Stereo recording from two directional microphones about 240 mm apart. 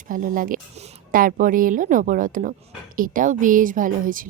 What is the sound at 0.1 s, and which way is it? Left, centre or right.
A woman's voice, right.